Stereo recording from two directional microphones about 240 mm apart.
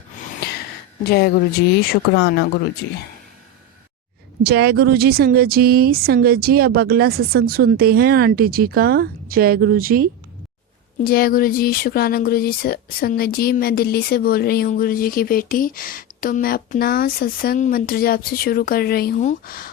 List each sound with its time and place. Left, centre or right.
1.1 s speech: left
4.4 s speech: right
11.0 s speech: left